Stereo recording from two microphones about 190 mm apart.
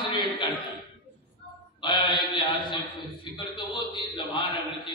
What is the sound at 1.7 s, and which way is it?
A man's voice, 25° left (ahead or behind).